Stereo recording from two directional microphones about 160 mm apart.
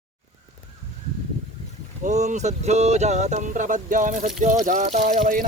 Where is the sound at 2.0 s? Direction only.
50° right (ahead or behind).